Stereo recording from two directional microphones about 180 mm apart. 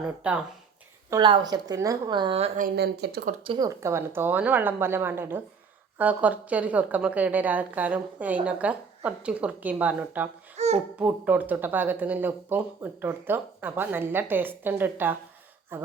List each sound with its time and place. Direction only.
0.2 s speech: 5° right (ahead or behind)
1.1 s a woman's voice: 25° right (ahead or behind)
2.6 s speech: 60° right (ahead or behind)
3.4 s a woman's voice: 30° right (ahead or behind)
3.8 s speech: 15° right (ahead or behind)
10.6 s babbling: 35° right (ahead or behind)
10.9 s speech: 10° right (ahead or behind)